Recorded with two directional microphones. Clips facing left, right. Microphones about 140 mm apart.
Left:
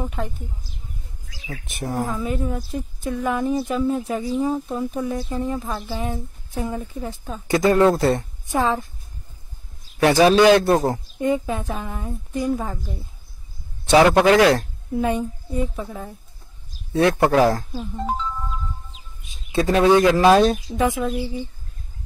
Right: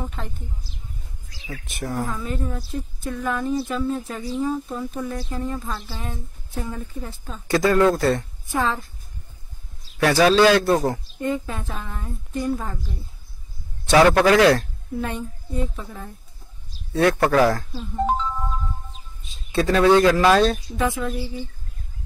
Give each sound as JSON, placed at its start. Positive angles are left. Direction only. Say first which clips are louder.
{"t": 0.0, "sound": "speech", "louder": "left 4 dB", "side_deg": 10}
{"t": 1.5, "sound": "a woman's voice", "louder": "left 1 dB", "side_deg": 20}
{"t": 10.0, "sound": "a woman's voice", "louder": "left 2 dB", "side_deg": 20}
{"t": 13.8, "sound": "a woman's voice", "louder": "left 1 dB", "side_deg": 20}
{"t": 15.0, "sound": "speech", "louder": "left 6 dB", "side_deg": 15}
{"t": 16.9, "sound": "a woman's voice", "louder": "left 1 dB", "side_deg": 20}
{"t": 19.5, "sound": "a woman's voice", "louder": "even", "side_deg": 20}